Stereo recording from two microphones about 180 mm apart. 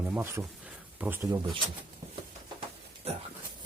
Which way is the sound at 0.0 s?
10° right (ahead or behind).